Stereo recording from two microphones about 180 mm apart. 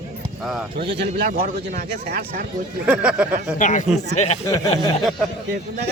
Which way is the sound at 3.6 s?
45° left (ahead or behind).